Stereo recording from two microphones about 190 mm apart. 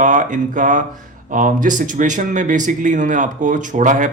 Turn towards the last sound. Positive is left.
turn(degrees=-40)  # may be behind; listen again after turning